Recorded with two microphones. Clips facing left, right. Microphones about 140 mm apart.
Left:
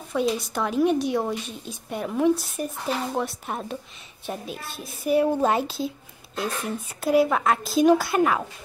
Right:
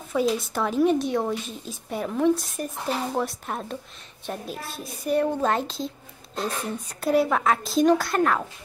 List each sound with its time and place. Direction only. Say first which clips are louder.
0.1 s speech: right 1 dB; centre (ahead or behind)
7.0 s speech: left 1 dB; centre (ahead or behind)